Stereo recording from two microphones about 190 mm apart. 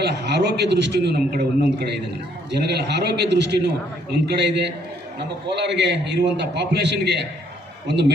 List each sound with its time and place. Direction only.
0.0 s a man's voice: 65° right (ahead or behind)
2.5 s a man's voice: 65° right (ahead or behind)